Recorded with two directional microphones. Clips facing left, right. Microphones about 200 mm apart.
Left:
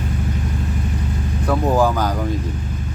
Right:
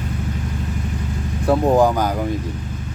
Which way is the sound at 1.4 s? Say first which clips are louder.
Right 3 dB; 25° right (ahead or behind).